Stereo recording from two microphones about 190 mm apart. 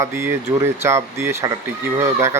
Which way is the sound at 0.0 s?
15° right (ahead or behind).